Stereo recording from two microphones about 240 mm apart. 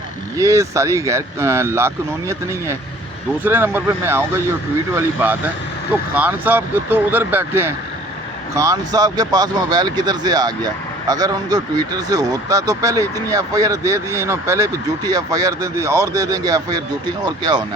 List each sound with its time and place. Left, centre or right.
0.3 s speech: centre